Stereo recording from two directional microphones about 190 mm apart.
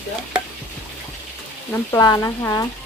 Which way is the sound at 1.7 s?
20° left (ahead or behind).